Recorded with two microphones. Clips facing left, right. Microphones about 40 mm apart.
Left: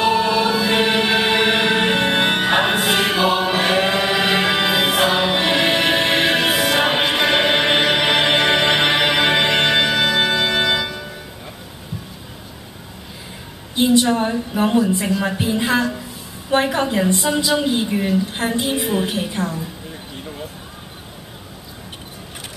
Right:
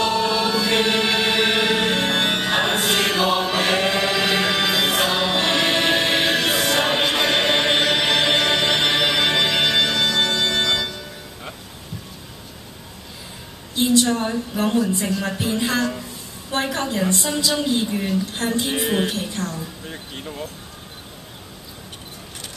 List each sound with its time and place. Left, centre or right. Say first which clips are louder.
0.0 s music: left 3 dB; centre
13.7 s a woman's voice: left 3 dB; centre
18.7 s music: left 1 dB; centre
19.0 s a woman's voice: left 3 dB; centre